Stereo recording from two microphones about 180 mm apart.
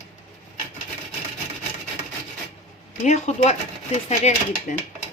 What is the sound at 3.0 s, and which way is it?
Speech, 40° left (ahead or behind).